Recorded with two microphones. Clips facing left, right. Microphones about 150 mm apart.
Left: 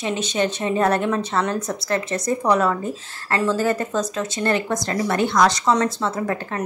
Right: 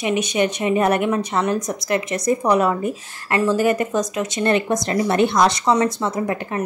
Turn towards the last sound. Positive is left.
turn(degrees=-15)  # may be behind; listen again after turning